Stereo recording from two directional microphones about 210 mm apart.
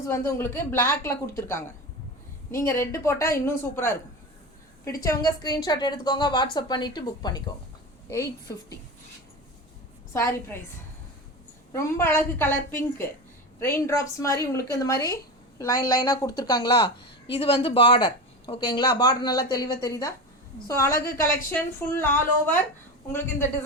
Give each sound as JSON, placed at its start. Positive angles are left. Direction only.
{"t": 0.1, "sound": "a woman's voice", "side_deg": 10}
{"t": 5.0, "sound": "a woman's voice", "side_deg": 20}
{"t": 10.1, "sound": "a woman's voice", "side_deg": 10}
{"t": 11.7, "sound": "a woman's voice", "side_deg": 10}